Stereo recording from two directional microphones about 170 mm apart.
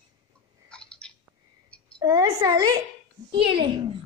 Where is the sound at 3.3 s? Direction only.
30° right (ahead or behind).